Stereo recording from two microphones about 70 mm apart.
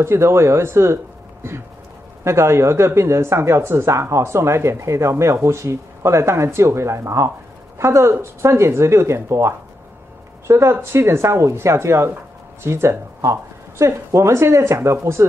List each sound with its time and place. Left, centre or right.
0.0 s speech: right
2.2 s speech: right